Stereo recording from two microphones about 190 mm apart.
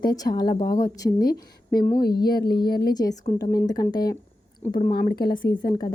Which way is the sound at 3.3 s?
20° left (ahead or behind).